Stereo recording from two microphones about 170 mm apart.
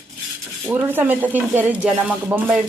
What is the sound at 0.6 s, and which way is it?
Speech, 10° right (ahead or behind).